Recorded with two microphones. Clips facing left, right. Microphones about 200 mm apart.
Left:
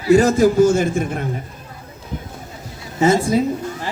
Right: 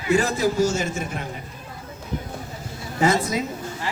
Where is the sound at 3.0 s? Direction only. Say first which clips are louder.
Left 6 dB; 25° left (ahead or behind).